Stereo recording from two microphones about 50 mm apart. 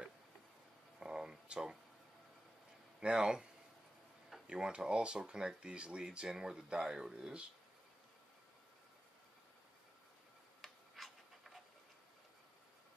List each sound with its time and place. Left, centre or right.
0.9 s a sound: centre
3.0 s speech: centre
4.5 s speech: centre
11.0 s pant: centre